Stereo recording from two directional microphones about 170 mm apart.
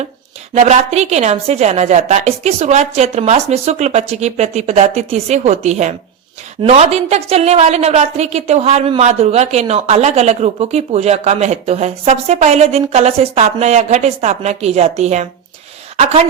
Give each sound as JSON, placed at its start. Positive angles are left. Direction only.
{"t": 0.5, "sound": "speech", "side_deg": -40}